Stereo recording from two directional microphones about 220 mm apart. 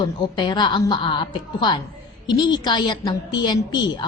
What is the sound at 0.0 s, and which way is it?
A woman's voice, 20° left (ahead or behind).